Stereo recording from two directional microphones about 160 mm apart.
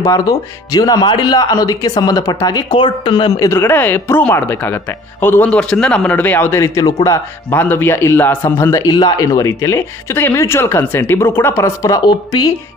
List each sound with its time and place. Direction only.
0.0 s speech: 20° left (ahead or behind)
3.4 s a man's voice: 15° left (ahead or behind)